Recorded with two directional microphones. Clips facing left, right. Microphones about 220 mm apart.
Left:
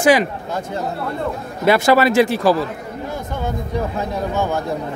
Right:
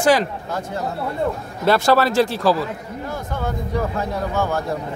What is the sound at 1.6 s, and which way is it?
Speech, 15° left (ahead or behind).